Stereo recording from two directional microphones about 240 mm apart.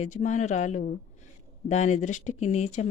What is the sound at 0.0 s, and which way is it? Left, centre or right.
Speech, left.